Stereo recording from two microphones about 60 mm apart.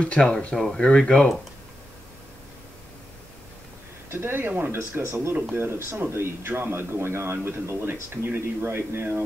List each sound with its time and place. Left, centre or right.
0.0 s speech: centre
4.1 s speech: right
5.3 s speech: right